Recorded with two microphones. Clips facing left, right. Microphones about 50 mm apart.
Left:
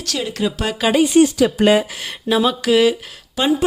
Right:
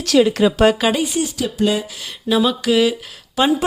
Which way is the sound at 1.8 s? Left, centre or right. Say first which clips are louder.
Left 3 dB; left.